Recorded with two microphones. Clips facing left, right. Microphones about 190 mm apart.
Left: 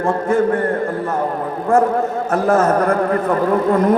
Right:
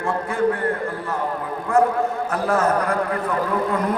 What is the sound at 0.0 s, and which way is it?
Speech, 45° left (ahead or behind).